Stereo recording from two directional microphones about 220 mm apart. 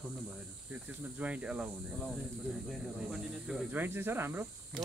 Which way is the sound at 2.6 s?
Centre (ahead or behind).